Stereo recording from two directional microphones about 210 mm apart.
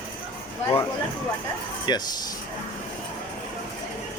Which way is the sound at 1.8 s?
20° left (ahead or behind).